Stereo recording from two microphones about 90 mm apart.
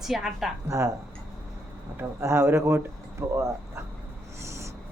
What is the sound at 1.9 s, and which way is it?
Speech, 30° right (ahead or behind).